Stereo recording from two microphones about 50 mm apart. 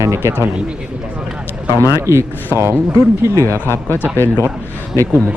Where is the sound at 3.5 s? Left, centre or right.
Left.